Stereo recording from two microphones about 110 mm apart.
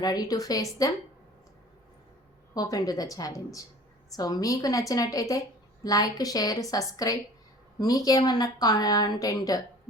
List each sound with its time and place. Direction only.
0.0 s a woman's voice: 35° left (ahead or behind)
2.6 s a woman's voice: 35° left (ahead or behind)